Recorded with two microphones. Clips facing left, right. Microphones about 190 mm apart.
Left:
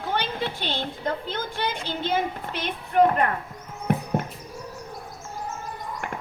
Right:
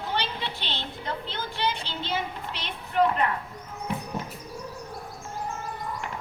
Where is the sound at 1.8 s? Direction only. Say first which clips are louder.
Left 6 dB; 50° left (ahead or behind).